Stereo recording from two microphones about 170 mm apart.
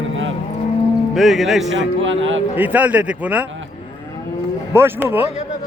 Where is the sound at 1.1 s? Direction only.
Centre (ahead or behind).